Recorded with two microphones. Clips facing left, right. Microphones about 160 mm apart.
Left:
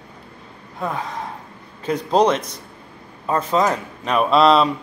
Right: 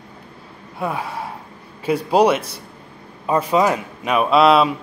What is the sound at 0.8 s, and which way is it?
Speech, 10° right (ahead or behind).